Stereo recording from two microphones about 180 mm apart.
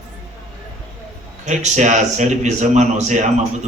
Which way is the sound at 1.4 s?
40° right (ahead or behind).